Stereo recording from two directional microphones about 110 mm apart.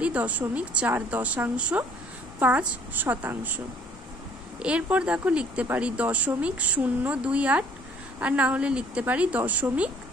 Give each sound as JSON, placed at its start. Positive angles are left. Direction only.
{"t": 0.0, "sound": "speech", "side_deg": -15}